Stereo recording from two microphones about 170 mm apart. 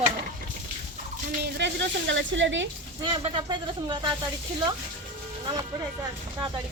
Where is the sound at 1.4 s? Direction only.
90° right.